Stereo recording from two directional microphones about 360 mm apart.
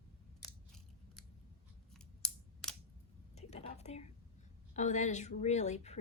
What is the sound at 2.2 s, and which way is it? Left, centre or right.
Computer keyboard, centre.